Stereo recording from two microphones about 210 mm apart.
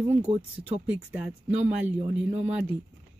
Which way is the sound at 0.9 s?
5° right (ahead or behind).